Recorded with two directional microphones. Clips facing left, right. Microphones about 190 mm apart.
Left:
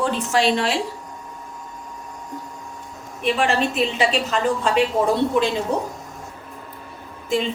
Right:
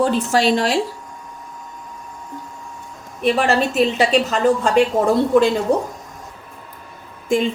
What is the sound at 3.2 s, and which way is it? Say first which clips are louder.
A woman's voice: right 3 dB; 40° right (ahead or behind).